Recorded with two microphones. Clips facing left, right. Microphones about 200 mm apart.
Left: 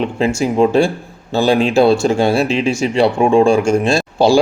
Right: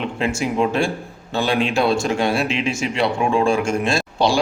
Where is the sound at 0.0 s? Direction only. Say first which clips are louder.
Left 6 dB; 35° left (ahead or behind).